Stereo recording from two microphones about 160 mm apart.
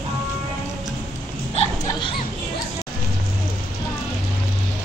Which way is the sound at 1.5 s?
35° left (ahead or behind).